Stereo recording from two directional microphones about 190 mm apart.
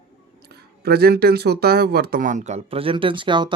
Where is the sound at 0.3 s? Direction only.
60° right (ahead or behind).